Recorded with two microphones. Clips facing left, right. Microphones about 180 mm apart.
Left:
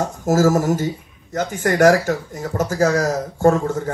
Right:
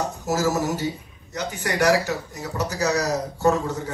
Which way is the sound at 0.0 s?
50° left (ahead or behind).